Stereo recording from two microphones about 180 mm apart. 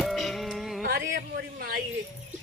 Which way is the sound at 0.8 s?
55° right (ahead or behind).